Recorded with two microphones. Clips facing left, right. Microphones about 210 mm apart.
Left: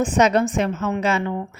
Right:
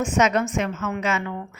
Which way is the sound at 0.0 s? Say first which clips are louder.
Left 3 dB; 35° left (ahead or behind).